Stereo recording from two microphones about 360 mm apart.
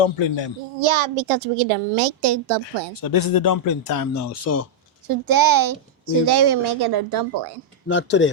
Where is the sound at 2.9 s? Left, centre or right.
Left.